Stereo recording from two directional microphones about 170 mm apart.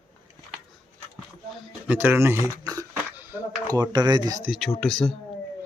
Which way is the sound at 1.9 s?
10° right (ahead or behind).